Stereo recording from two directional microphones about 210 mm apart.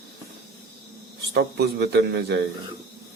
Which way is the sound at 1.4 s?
50° right (ahead or behind).